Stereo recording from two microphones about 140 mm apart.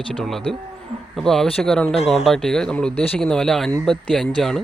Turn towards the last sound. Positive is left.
turn(degrees=0)  # may be behind; listen again after turning